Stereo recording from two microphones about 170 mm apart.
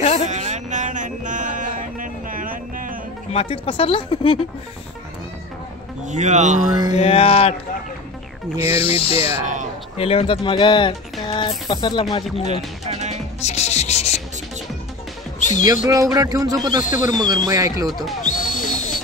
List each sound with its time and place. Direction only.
0.0 s a sound: 40° left (ahead or behind)
0.3 s a sound: 45° right (ahead or behind)
3.3 s speech: 30° left (ahead or behind)
6.0 s speech: 45° right (ahead or behind)
7.0 s speech: 35° left (ahead or behind)
8.5 s speech: 35° left (ahead or behind)
12.8 s music: 40° right (ahead or behind)
13.4 s rub: 40° left (ahead or behind)
15.6 s speech: 20° right (ahead or behind)
17.8 s speech: centre (ahead or behind)
18.2 s owl: 50° left (ahead or behind)